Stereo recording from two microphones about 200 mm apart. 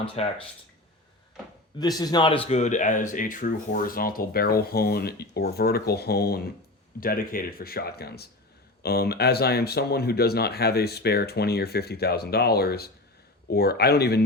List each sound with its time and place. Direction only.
0.2 s speech: 30° left (ahead or behind)
1.8 s speech: 20° left (ahead or behind); by 14.3 s 55° left (ahead or behind)